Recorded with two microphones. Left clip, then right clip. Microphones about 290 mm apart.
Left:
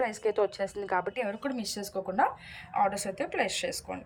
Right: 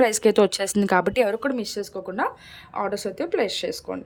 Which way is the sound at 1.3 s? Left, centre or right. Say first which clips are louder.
Right 9 dB; centre.